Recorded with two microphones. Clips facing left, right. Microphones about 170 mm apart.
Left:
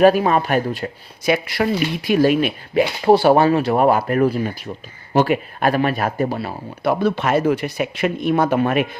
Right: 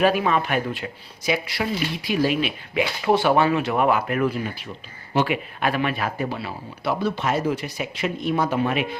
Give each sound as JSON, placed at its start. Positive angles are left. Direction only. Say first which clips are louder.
{"t": 0.0, "sound": "speech", "louder": "left 6 dB", "side_deg": 40}
{"t": 1.2, "sound": "speech", "louder": "left 6 dB", "side_deg": 55}
{"t": 7.0, "sound": "speech", "louder": "left 5 dB", "side_deg": 60}